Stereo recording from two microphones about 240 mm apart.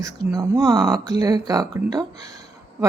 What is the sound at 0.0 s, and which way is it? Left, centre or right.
Speech, centre.